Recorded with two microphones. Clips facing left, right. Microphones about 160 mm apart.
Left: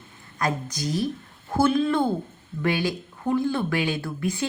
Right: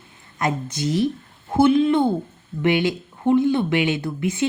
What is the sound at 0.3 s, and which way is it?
Speech, 25° right (ahead or behind).